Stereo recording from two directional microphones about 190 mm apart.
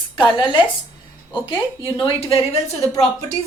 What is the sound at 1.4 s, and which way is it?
Speech, 25° left (ahead or behind).